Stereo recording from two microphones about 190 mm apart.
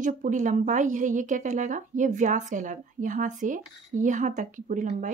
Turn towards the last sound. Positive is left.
turn(degrees=-40)  # may be behind; listen again after turning